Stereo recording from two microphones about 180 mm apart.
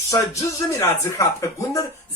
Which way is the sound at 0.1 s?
15° left (ahead or behind).